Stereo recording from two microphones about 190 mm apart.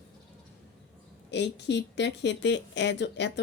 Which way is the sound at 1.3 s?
65° left (ahead or behind).